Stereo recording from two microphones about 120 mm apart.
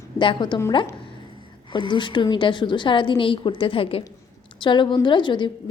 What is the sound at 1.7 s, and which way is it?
A woman's voice, 40° left (ahead or behind).